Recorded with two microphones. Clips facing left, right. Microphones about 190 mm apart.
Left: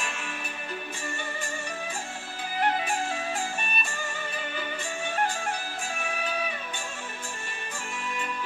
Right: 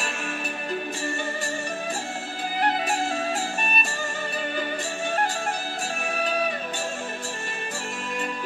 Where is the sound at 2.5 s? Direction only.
40° right (ahead or behind).